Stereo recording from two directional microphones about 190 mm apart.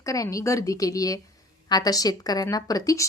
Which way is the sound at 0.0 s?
15° left (ahead or behind).